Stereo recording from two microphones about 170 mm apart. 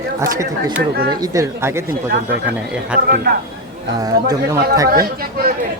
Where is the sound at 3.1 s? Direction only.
60° right (ahead or behind).